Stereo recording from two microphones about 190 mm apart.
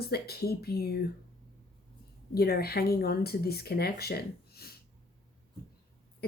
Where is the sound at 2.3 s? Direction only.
55° left (ahead or behind).